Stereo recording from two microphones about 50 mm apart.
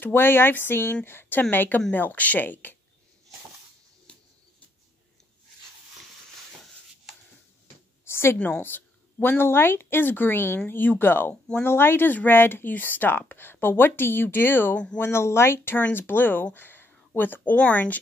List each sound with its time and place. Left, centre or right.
0.0 s speech: left
8.0 s a sound: left
8.6 s speech: left
15.0 s speech: left
16.5 s a sound: left
17.2 s speech: left